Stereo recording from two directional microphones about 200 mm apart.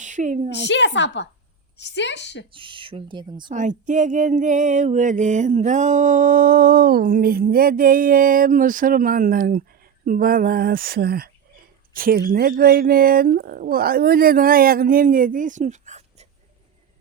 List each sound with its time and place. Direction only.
0.0 s a woman's voice: 40° right (ahead or behind)
0.7 s a woman's voice: 60° left (ahead or behind)
2.5 s speech: 25° right (ahead or behind)
3.5 s mantra: 40° right (ahead or behind)
10.1 s speech: 45° right (ahead or behind)